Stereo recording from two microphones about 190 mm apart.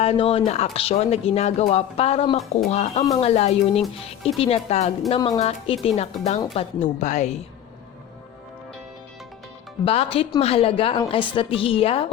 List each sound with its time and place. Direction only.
0.0 s speech: 30° left (ahead or behind)
9.8 s a woman's voice: 30° left (ahead or behind)